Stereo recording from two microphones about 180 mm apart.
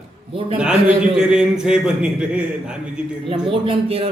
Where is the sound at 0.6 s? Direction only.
5° right (ahead or behind).